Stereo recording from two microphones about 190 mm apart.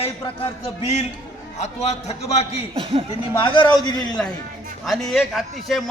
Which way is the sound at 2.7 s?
30° right (ahead or behind).